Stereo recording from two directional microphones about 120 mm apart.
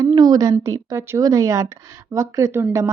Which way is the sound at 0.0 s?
30° right (ahead or behind).